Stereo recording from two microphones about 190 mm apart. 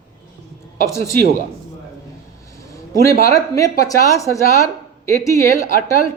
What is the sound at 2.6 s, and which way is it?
A man's voice, 15° left (ahead or behind).